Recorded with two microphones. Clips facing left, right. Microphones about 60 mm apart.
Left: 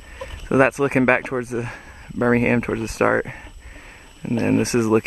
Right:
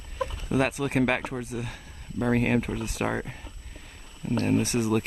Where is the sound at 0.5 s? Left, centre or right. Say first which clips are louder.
Left 10 dB; left.